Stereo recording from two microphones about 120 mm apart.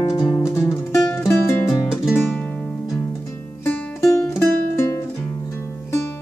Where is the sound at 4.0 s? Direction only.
20° left (ahead or behind).